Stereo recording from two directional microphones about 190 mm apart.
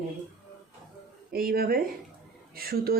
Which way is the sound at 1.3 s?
50° right (ahead or behind).